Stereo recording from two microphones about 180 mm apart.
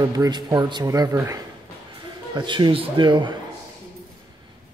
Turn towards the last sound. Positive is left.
turn(degrees=-25)  # may be behind; listen again after turning